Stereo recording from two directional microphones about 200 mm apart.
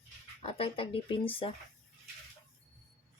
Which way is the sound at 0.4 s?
25° left (ahead or behind).